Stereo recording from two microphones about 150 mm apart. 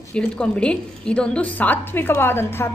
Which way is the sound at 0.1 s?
5° left (ahead or behind).